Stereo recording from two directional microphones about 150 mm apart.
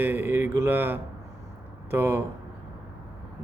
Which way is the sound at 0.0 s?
15° right (ahead or behind).